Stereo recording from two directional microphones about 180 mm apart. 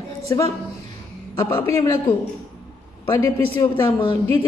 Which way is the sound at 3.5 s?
30° left (ahead or behind).